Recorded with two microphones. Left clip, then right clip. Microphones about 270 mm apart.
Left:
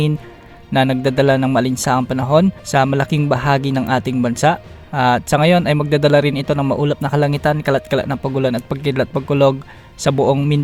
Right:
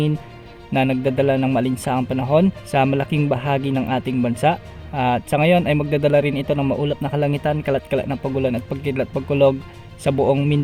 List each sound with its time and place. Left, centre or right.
0.7 s speech: left